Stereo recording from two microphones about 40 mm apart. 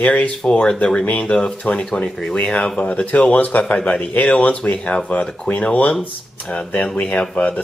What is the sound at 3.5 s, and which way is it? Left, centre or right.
Speech, left.